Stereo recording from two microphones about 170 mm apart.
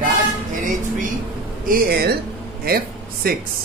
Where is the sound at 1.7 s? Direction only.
60° right (ahead or behind).